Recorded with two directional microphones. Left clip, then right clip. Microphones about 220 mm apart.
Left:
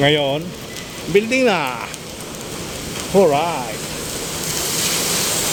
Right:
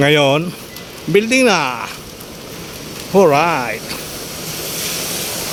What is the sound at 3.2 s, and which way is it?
Speech, 30° right (ahead or behind).